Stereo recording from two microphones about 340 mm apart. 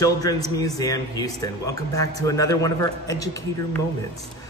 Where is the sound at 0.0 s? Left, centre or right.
Centre.